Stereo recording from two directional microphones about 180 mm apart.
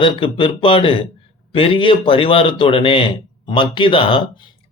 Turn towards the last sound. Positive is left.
turn(degrees=30)  # may be behind; listen again after turning